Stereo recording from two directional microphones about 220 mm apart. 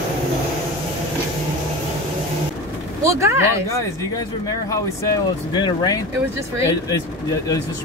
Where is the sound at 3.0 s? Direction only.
15° right (ahead or behind).